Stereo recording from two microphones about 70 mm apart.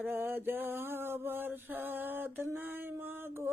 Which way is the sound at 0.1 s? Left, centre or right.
Right.